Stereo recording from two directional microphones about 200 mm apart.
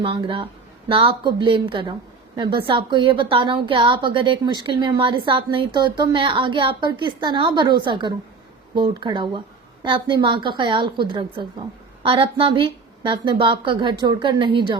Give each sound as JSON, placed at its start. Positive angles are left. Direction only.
{"t": 0.0, "sound": "a woman's voice", "side_deg": -25}